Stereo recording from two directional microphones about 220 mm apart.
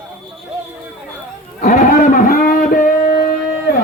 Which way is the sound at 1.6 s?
35° left (ahead or behind).